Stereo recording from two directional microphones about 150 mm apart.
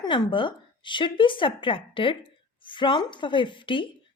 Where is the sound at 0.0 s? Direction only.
30° left (ahead or behind).